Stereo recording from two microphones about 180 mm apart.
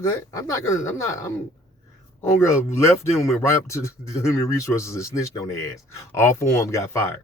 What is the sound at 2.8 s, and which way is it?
Speech, 15° left (ahead or behind).